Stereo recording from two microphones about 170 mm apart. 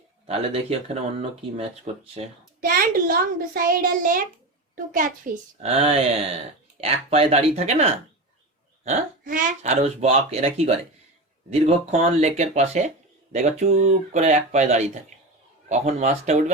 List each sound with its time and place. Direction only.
0.3 s speech: 35° right (ahead or behind)
2.6 s child singing: 60° right (ahead or behind)
4.7 s speech: 55° right (ahead or behind)
5.6 s speech: 35° right (ahead or behind)
11.6 s speech: 40° right (ahead or behind)
15.1 s a sound: 45° right (ahead or behind)
15.7 s speech: 45° right (ahead or behind)